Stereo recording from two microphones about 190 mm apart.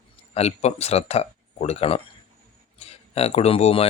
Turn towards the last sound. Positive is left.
turn(degrees=30)  # may be behind; listen again after turning